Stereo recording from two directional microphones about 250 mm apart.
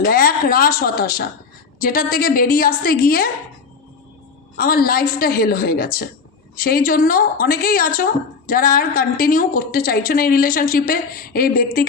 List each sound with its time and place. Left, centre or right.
0.0 s a woman's voice: left
4.5 s a woman's voice: left